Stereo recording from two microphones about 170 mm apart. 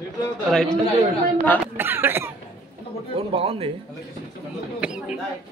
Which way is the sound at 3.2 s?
35° right (ahead or behind).